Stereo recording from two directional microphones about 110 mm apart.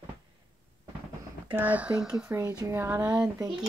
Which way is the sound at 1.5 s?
15° right (ahead or behind).